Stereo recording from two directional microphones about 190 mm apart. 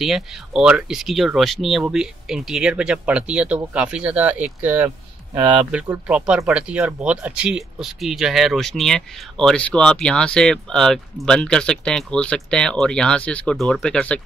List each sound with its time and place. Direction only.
0.0 s speech: centre (ahead or behind)